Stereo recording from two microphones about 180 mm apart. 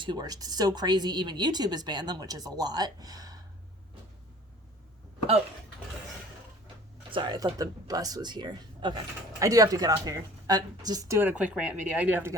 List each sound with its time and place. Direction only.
0.0 s a woman's voice: 25° right (ahead or behind)
7.1 s a woman's voice: 25° right (ahead or behind)